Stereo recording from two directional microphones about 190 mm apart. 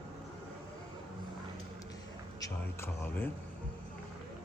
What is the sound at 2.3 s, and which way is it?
Speech, 15° left (ahead or behind).